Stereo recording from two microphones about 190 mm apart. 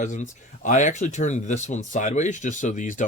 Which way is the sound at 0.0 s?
40° left (ahead or behind).